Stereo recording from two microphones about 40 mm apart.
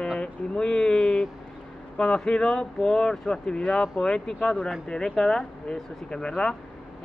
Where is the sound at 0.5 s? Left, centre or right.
Centre.